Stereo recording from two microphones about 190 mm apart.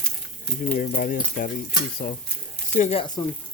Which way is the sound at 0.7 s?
45° left (ahead or behind).